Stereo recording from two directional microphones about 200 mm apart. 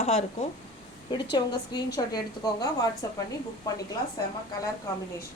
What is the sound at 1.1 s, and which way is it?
A woman's voice, 20° left (ahead or behind).